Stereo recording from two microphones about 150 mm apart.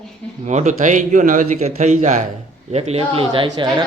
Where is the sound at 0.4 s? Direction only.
50° right (ahead or behind).